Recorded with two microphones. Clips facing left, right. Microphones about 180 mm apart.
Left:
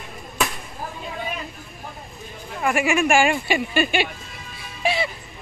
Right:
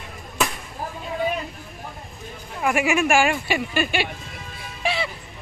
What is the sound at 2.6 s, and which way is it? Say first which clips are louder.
Speech: even; 5° right (ahead or behind).